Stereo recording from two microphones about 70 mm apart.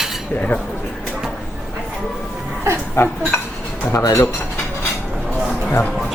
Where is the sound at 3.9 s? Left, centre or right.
Left.